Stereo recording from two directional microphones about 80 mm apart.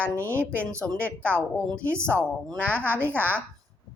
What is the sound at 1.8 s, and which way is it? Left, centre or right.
Speech, right.